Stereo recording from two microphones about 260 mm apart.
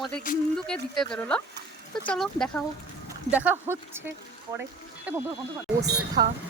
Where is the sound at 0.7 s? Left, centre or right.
Centre.